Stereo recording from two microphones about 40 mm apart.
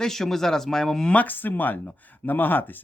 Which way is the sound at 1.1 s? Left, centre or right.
Left.